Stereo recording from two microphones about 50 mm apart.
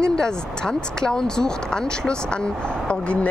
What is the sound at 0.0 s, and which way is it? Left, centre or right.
Speech, centre.